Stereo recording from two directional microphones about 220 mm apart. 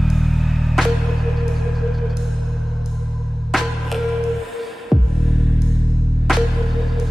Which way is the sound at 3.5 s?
Centre (ahead or behind).